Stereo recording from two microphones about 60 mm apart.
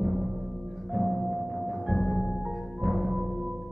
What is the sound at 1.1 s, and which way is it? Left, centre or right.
Music, centre.